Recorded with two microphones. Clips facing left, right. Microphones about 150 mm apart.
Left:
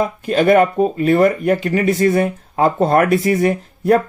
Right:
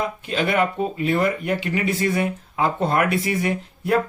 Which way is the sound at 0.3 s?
45° left (ahead or behind).